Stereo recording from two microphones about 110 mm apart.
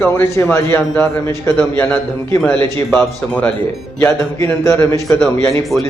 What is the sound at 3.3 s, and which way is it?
A man's voice, 10° left (ahead or behind).